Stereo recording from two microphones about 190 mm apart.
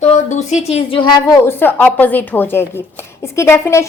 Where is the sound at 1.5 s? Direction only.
10° left (ahead or behind).